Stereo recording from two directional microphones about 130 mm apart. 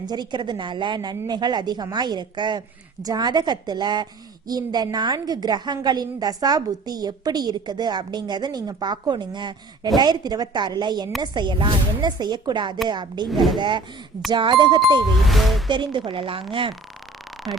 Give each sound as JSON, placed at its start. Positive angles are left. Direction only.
{"t": 0.0, "sound": "a woman's voice", "side_deg": -35}
{"t": 13.3, "sound": "speech", "side_deg": 0}
{"t": 13.6, "sound": "a woman's voice", "side_deg": -35}
{"t": 15.3, "sound": "speech", "side_deg": 0}
{"t": 15.7, "sound": "a woman's voice", "side_deg": -35}